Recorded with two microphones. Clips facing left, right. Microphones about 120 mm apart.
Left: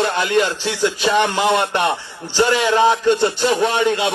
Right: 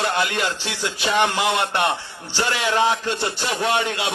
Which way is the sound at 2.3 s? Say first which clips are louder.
Left 8 dB; 25° left (ahead or behind).